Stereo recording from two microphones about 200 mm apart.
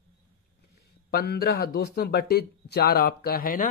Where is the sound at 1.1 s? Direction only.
50° left (ahead or behind).